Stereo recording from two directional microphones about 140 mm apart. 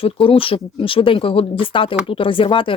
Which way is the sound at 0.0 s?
40° left (ahead or behind).